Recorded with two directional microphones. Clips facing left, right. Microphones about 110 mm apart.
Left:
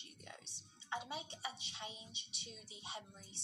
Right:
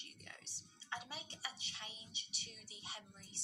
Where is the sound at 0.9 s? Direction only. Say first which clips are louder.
Left 4 dB; 25° left (ahead or behind).